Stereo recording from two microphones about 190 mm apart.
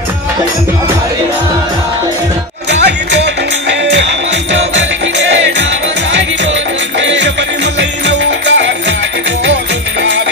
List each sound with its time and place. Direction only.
2.7 s music: 65° right (ahead or behind)
7.0 s music: 70° right (ahead or behind)